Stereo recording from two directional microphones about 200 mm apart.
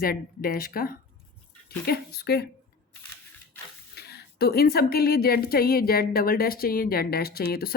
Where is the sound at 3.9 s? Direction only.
55° left (ahead or behind).